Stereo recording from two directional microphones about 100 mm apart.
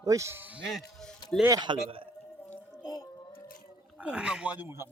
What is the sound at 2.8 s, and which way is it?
Music, 40° left (ahead or behind).